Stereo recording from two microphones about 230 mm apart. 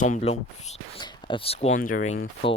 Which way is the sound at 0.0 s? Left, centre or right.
Left.